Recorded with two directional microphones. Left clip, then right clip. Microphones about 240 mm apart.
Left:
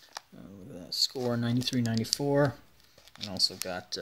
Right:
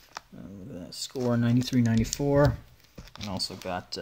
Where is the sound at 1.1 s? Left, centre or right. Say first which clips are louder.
Right 4 dB; centre.